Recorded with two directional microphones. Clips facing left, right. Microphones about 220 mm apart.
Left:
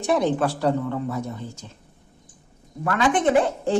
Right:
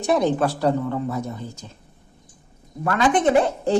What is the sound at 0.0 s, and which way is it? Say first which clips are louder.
Speech: right 1 dB; 40° right (ahead or behind).